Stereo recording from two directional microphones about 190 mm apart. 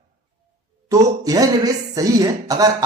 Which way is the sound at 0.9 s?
20° right (ahead or behind).